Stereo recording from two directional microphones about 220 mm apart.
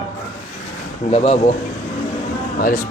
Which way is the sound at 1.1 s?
25° left (ahead or behind).